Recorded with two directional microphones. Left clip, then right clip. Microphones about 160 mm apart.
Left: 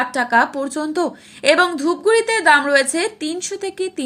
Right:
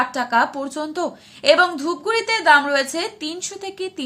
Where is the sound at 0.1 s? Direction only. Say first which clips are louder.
Left 3 dB; 25° left (ahead or behind).